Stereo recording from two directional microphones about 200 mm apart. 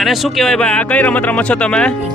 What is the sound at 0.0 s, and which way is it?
Speech, centre (ahead or behind).